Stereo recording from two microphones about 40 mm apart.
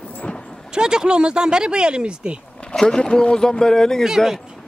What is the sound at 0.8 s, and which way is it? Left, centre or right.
Speech, centre.